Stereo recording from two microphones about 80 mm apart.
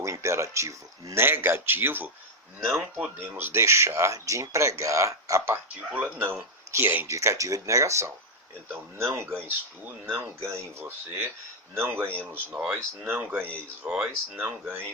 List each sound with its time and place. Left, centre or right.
0.0 s speech: right
2.7 s speech: centre
3.3 s speech: right
5.5 s speech: right